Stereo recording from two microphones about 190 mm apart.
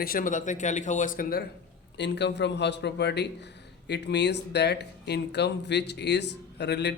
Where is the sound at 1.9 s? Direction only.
65° left (ahead or behind).